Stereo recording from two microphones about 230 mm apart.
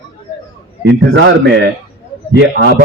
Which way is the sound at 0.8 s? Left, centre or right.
Right.